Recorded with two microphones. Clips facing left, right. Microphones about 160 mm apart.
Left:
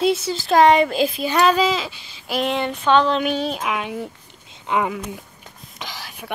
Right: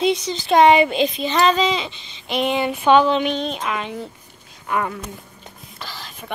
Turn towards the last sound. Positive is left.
turn(degrees=10)  # may be behind; listen again after turning